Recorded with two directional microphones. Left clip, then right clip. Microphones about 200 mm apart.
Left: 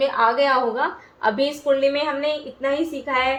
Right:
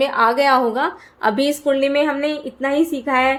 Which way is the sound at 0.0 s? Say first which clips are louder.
Right 3 dB; 55° right (ahead or behind).